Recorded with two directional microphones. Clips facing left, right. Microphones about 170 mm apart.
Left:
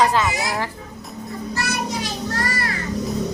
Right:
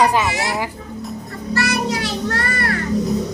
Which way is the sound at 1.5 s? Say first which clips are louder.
Right 7 dB; 70° right (ahead or behind).